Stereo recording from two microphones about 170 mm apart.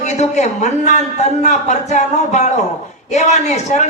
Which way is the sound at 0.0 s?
40° left (ahead or behind).